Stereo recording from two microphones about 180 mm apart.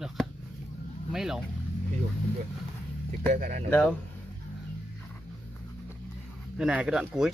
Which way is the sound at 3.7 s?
10° left (ahead or behind).